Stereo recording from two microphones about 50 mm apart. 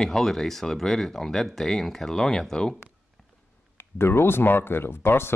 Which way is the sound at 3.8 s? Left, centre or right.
Left.